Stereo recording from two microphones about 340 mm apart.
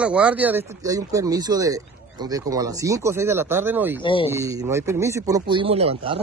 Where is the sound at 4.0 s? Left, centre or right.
Centre.